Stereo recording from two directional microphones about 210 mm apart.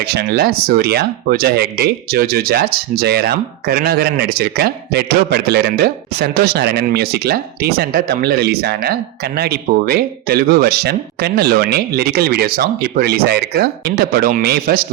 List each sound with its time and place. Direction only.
0.0 s speech: 50° right (ahead or behind)